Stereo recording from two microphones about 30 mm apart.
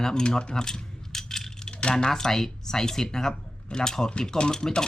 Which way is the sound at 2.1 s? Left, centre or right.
Centre.